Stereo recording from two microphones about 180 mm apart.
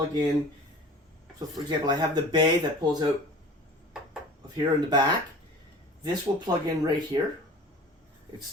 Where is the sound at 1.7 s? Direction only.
25° right (ahead or behind).